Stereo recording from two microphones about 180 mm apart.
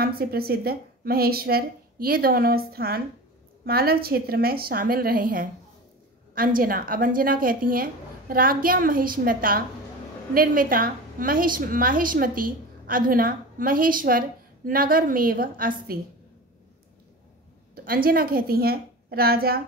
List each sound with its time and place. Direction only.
0.0 s a woman's voice: 55° right (ahead or behind)
17.8 s a woman's voice: 55° right (ahead or behind)